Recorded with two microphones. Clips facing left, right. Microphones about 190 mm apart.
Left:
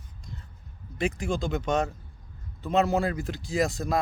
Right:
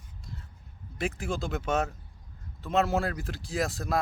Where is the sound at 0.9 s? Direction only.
Centre (ahead or behind).